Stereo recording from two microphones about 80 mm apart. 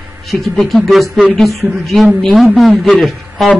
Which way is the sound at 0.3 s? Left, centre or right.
Centre.